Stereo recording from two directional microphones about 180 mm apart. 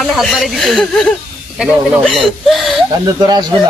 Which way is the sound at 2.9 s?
20° right (ahead or behind).